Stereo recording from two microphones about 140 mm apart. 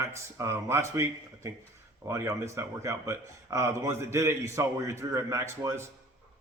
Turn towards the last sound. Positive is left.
turn(degrees=-20)  # may be behind; listen again after turning